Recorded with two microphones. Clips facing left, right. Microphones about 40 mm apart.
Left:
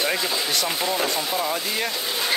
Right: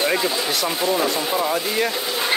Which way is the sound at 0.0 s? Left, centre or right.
Centre.